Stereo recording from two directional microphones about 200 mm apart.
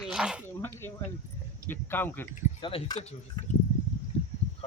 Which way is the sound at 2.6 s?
25° left (ahead or behind).